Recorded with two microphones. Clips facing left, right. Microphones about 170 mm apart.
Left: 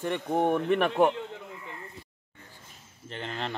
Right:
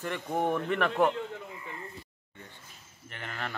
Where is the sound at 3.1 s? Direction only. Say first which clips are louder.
Left 4 dB; 30° left (ahead or behind).